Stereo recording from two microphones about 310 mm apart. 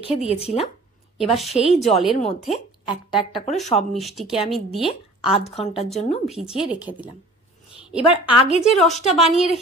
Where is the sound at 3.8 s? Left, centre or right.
Centre.